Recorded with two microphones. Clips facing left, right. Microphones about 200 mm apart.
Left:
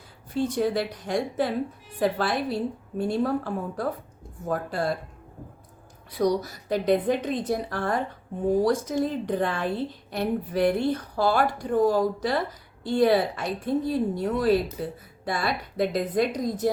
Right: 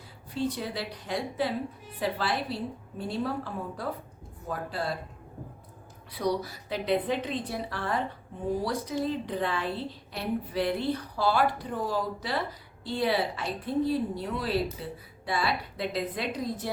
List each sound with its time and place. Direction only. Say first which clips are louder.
0.3 s a woman's voice: left 7 dB; 50° left (ahead or behind)
6.1 s a woman's voice: left 5 dB; 45° left (ahead or behind)